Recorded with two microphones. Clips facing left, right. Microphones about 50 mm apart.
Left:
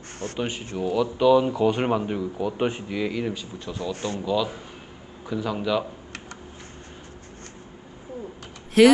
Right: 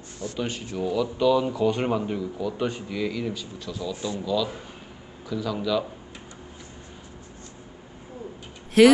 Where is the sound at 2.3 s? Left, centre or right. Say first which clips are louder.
Left 2 dB; left.